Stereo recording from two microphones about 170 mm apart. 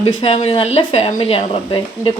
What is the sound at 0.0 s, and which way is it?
Speech, 35° left (ahead or behind).